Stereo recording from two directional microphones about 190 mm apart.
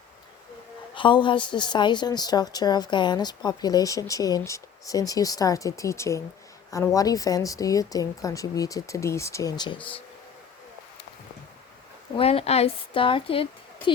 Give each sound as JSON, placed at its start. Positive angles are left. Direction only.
{"t": 0.9, "sound": "a woman's voice", "side_deg": 25}
{"t": 12.1, "sound": "a woman's voice", "side_deg": 30}